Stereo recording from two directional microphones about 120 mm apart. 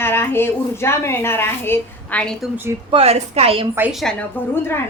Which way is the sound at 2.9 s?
55° right (ahead or behind).